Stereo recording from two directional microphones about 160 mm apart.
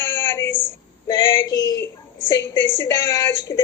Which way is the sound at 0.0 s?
15° left (ahead or behind).